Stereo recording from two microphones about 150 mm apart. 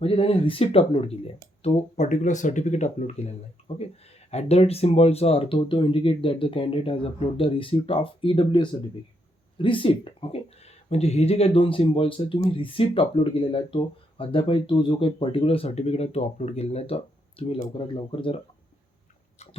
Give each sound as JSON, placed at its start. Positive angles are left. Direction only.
{"t": 0.0, "sound": "speech", "side_deg": 40}